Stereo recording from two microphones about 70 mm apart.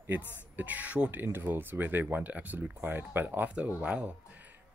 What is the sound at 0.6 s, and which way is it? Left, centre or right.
Speech, right.